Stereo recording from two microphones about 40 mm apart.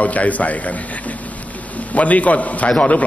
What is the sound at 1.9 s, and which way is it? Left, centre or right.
A man's voice, left.